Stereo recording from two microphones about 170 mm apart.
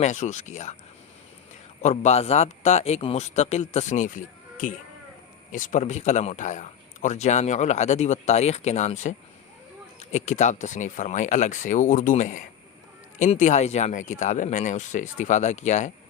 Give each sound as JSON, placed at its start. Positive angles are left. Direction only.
{"t": 0.0, "sound": "speech", "side_deg": 45}
{"t": 1.8, "sound": "speech", "side_deg": 40}